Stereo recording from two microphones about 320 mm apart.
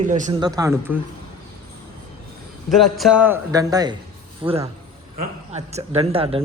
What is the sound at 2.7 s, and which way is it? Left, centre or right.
A man's voice, centre.